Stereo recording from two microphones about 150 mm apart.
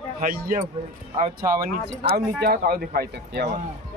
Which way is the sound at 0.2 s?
70° right (ahead or behind).